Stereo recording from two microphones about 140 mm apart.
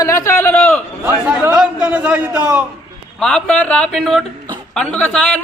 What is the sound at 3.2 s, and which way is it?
A man's voice, 5° left (ahead or behind).